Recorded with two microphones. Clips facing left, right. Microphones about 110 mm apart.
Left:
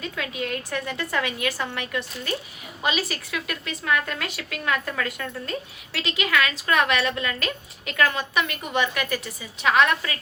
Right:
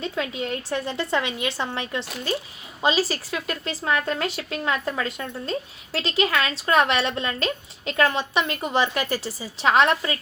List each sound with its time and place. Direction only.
0.0 s a woman's voice: 30° right (ahead or behind)